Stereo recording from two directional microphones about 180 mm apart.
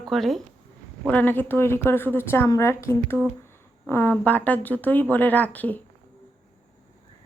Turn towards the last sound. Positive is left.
turn(degrees=10)  # may be behind; listen again after turning